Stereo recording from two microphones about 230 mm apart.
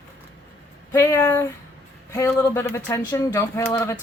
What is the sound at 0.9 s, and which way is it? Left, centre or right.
A woman's voice, centre.